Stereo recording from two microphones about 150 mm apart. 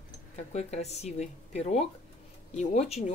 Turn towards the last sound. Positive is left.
turn(degrees=45)  # may be behind; listen again after turning